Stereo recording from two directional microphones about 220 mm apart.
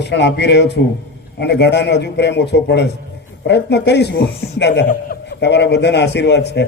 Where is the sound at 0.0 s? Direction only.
50° left (ahead or behind).